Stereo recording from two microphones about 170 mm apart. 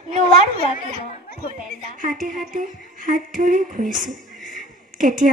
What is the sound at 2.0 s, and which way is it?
A woman's voice, 50° right (ahead or behind).